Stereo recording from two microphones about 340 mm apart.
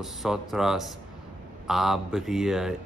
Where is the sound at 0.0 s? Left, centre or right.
Centre.